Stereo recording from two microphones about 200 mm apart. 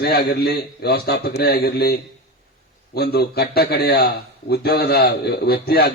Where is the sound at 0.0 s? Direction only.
50° left (ahead or behind).